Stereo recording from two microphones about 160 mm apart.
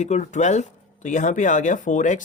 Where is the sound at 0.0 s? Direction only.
45° left (ahead or behind).